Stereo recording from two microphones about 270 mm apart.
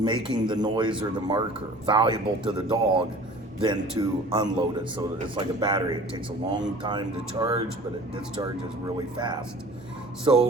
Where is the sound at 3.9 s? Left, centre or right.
Centre.